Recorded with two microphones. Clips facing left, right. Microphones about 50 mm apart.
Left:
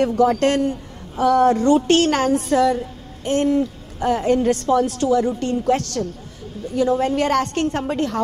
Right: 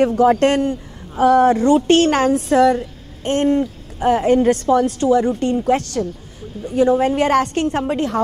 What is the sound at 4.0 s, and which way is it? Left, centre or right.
Speech, centre.